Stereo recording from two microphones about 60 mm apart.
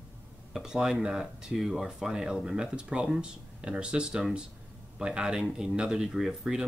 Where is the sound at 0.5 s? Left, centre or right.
Centre.